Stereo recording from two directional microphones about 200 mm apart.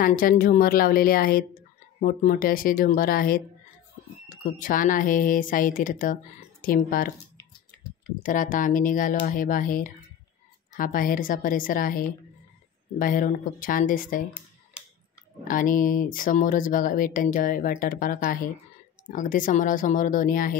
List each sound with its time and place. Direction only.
0.0 s speech: 45° left (ahead or behind)
8.2 s speech: 40° left (ahead or behind)
13.0 s speech: 45° left (ahead or behind)
15.4 s speech: 40° left (ahead or behind)